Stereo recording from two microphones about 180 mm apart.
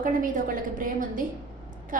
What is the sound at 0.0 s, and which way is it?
A woman's voice, 50° right (ahead or behind).